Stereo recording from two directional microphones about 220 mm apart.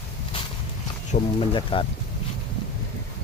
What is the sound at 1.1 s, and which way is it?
Speech, 25° left (ahead or behind).